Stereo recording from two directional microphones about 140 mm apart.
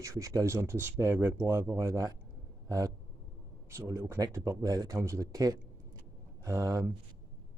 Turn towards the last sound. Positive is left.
turn(degrees=-20)  # may be behind; listen again after turning